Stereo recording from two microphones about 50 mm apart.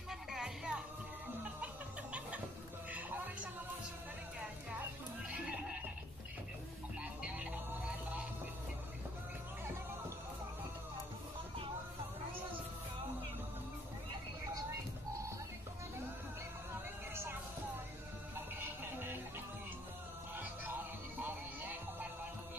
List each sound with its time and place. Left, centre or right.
0.1 s music: centre
2.9 s music: right
7.0 s frog: right
17.1 s music: right
20.3 s music: right